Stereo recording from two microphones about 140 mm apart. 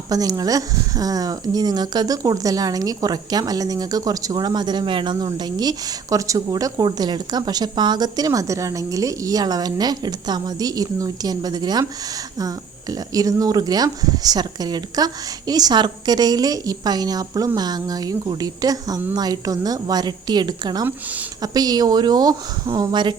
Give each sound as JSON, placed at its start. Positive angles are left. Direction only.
{"t": 0.1, "sound": "speech", "side_deg": -25}
{"t": 20.8, "sound": "speech", "side_deg": -10}
{"t": 21.4, "sound": "speech", "side_deg": -30}